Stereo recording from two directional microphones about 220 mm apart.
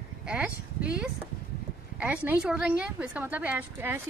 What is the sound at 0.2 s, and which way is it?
A woman's voice, 5° right (ahead or behind).